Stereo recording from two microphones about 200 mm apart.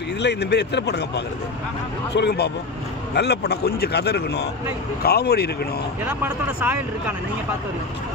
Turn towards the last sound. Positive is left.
turn(degrees=-10)  # may be behind; listen again after turning